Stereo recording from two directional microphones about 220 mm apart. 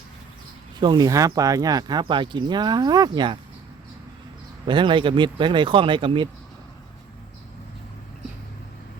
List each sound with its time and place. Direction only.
0.8 s speech: 20° right (ahead or behind)
4.6 s speech: 20° right (ahead or behind)